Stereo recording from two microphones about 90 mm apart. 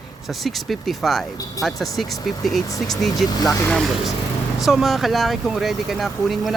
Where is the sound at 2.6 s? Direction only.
40° left (ahead or behind).